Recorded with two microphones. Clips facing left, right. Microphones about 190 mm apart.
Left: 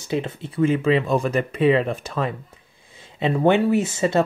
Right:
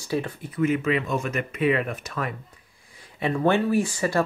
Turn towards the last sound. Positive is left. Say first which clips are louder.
# left 3 dB
turn(degrees=25)  # may be behind; listen again after turning